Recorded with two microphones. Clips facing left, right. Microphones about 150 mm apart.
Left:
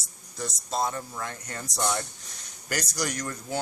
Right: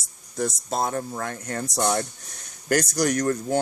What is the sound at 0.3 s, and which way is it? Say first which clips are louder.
Speech: right 4 dB; 55° right (ahead or behind).